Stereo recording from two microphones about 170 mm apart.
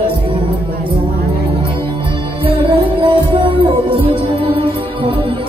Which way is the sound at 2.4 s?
30° right (ahead or behind).